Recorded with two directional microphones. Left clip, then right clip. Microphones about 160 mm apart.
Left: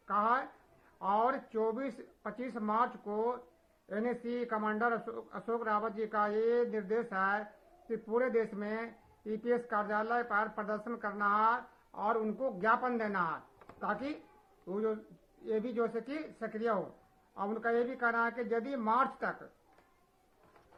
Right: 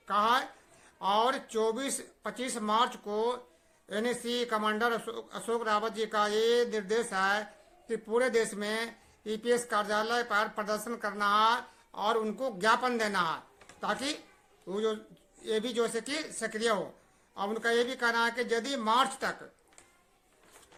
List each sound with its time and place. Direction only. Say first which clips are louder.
0.1 s speech: right 4 dB; 25° right (ahead or behind)